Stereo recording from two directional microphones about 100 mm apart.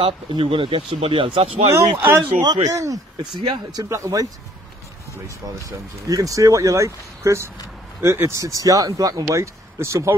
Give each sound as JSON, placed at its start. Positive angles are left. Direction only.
{"t": 0.3, "sound": "speech", "side_deg": -60}
{"t": 1.7, "sound": "speech", "side_deg": -20}
{"t": 2.4, "sound": "speech", "side_deg": -40}
{"t": 3.3, "sound": "speech", "side_deg": -50}
{"t": 3.9, "sound": "speech", "side_deg": -35}
{"t": 6.0, "sound": "speech", "side_deg": -35}